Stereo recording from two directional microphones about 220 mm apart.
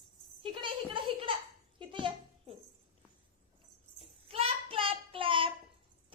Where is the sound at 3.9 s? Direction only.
25° right (ahead or behind).